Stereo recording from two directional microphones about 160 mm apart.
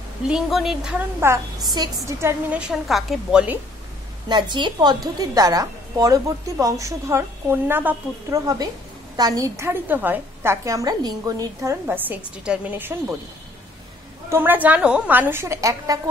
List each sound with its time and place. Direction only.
0.3 s a woman's voice: centre (ahead or behind)
1.2 s a woman's voice: 15° right (ahead or behind)
4.3 s a woman's voice: 30° right (ahead or behind); by 13.1 s 10° right (ahead or behind)
14.3 s a woman's voice: 15° right (ahead or behind)